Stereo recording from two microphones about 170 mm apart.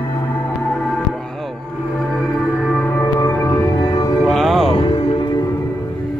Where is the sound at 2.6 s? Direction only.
5° left (ahead or behind); by 4.1 s 20° left (ahead or behind).